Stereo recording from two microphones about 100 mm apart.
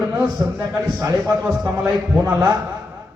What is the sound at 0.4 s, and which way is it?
A man's voice, 40° right (ahead or behind).